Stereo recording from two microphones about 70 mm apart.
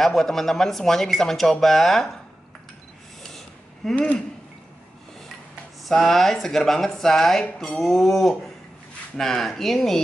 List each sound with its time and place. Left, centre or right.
0.0 s speech: centre
3.3 s a sound: centre
3.9 s speech: centre
5.9 s speech: centre